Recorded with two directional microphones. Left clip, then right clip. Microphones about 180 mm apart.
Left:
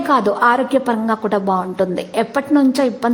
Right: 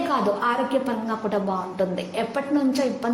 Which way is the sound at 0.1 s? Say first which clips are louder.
Left 11 dB; 45° left (ahead or behind).